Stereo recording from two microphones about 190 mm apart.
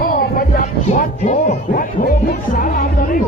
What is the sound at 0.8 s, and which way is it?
Speech, 40° left (ahead or behind).